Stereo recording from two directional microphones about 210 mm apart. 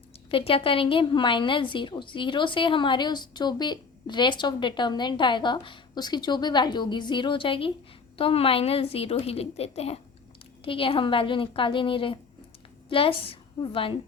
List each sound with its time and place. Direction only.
0.3 s a woman's voice: 25° left (ahead or behind)